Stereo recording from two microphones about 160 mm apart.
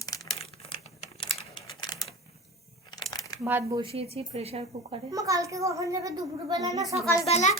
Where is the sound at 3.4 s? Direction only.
15° right (ahead or behind).